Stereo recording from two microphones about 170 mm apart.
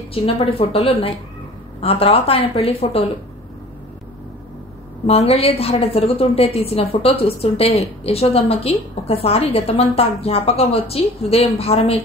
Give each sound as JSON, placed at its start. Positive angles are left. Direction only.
{"t": 0.1, "sound": "a woman's voice", "side_deg": 35}
{"t": 5.0, "sound": "a woman's voice", "side_deg": 35}